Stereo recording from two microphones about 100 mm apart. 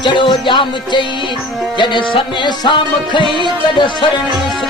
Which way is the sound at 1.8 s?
55° left (ahead or behind).